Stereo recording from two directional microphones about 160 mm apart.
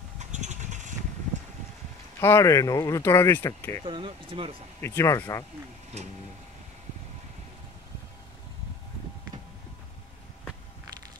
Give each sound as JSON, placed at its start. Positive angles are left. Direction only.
{"t": 0.2, "sound": "vehicle", "side_deg": -45}
{"t": 2.1, "sound": "speech", "side_deg": 15}
{"t": 3.8, "sound": "speech", "side_deg": -30}
{"t": 4.8, "sound": "speech", "side_deg": 15}